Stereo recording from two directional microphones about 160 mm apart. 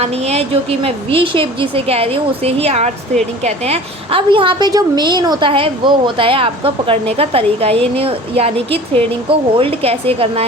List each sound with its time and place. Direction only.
0.0 s a woman's voice: 40° right (ahead or behind)